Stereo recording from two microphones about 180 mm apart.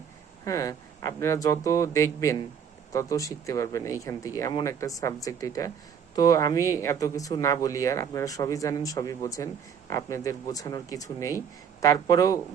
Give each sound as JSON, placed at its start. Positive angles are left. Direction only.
{"t": 0.4, "sound": "speech", "side_deg": 20}